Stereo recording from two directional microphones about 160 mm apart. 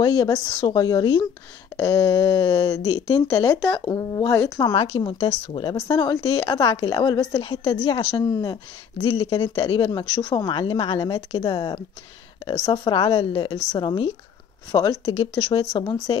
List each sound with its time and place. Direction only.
0.0 s speech: 25° left (ahead or behind)
4.9 s speech: 35° left (ahead or behind)
8.3 s speech: 25° left (ahead or behind)